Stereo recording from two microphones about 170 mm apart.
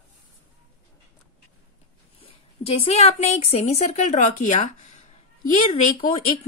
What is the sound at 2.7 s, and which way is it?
A woman's voice, 35° left (ahead or behind).